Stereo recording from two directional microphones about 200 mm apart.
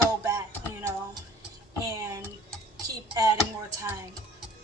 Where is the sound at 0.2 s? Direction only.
15° right (ahead or behind).